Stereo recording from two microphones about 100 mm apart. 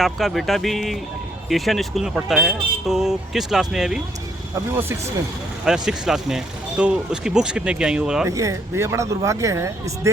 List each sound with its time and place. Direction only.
0.0 s speech: centre (ahead or behind)
4.8 s speech: 25° right (ahead or behind)
5.6 s speech: 5° right (ahead or behind)
8.3 s speech: 35° right (ahead or behind)